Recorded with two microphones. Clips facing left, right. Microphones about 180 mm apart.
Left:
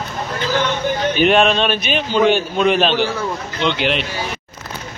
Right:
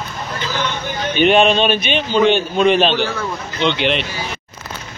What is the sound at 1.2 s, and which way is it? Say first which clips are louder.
A man's voice: right 2 dB; centre (ahead or behind).